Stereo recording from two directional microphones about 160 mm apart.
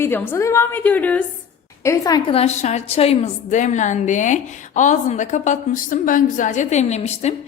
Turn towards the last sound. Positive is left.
turn(degrees=45)  # may be behind; listen again after turning